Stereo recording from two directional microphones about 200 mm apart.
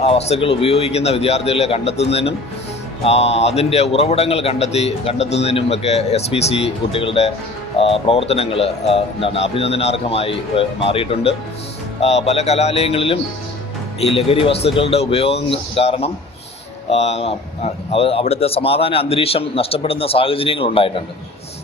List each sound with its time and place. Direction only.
0.0 s a man's voice: 30° left (ahead or behind)